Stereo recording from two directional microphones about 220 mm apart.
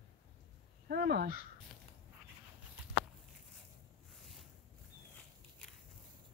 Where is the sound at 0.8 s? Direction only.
45° right (ahead or behind).